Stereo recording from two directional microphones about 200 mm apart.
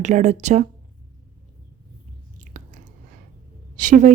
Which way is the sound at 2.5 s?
40° right (ahead or behind).